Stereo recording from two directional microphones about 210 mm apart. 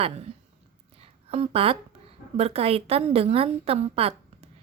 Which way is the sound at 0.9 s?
30° right (ahead or behind).